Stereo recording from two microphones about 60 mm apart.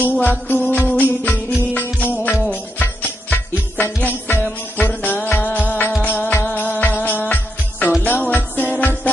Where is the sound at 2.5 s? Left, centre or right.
Left.